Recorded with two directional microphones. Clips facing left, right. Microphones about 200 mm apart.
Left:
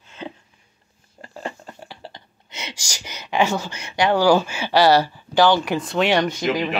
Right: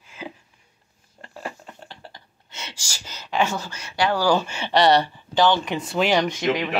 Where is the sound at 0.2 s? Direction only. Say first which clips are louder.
Left 2 dB; 5° right (ahead or behind).